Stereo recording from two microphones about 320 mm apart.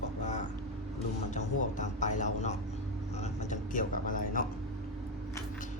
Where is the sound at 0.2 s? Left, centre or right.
Left.